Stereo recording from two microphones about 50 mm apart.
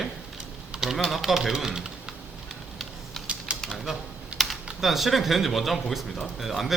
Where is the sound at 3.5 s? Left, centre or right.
Right.